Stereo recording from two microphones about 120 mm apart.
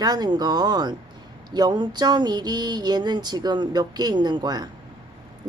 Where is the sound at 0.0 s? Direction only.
35° right (ahead or behind).